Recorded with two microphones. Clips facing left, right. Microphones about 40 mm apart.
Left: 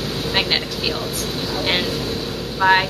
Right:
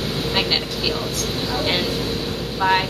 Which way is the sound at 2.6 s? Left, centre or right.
Centre.